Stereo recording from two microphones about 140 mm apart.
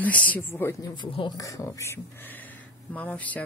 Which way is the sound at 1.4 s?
25° left (ahead or behind).